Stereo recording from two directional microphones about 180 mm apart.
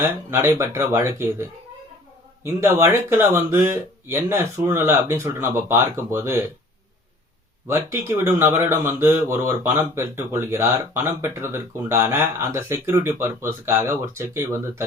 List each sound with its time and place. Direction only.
0.0 s speech: 10° right (ahead or behind)
7.7 s speech: 15° right (ahead or behind)